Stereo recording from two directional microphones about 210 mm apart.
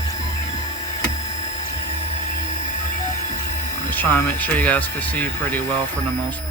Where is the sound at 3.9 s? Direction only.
10° left (ahead or behind).